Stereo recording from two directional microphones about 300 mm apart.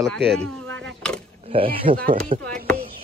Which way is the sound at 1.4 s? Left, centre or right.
Centre.